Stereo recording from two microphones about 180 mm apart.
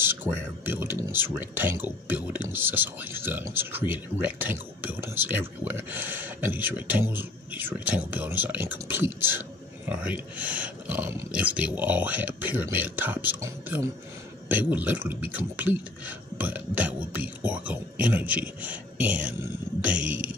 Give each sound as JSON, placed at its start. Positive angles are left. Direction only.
{"t": 0.0, "sound": "speech", "side_deg": -10}